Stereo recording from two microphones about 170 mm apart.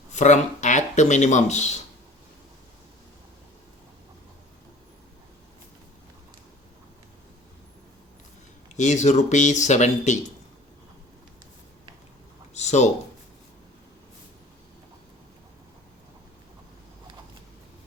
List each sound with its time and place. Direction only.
0.1 s speech: 45° left (ahead or behind)
8.7 s speech: 45° left (ahead or behind)
12.5 s a sound: 40° left (ahead or behind)